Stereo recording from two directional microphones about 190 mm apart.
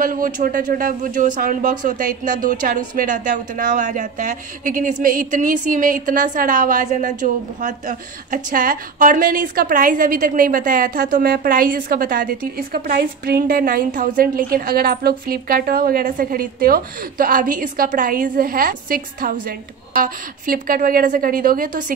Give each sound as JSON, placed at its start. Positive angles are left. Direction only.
{"t": 0.0, "sound": "a woman's voice", "side_deg": -45}